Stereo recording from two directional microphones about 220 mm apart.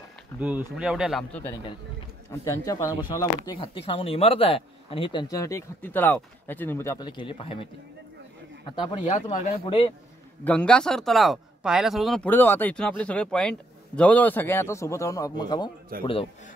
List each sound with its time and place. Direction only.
0.4 s speech: 5° right (ahead or behind)
2.4 s speech: 15° left (ahead or behind)
8.7 s speech: 20° left (ahead or behind)
10.4 s speech: 5° left (ahead or behind); by 16.3 s 25° left (ahead or behind)